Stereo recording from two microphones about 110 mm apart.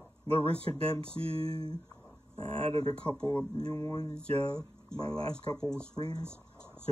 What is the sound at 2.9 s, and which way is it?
Speech, 10° left (ahead or behind).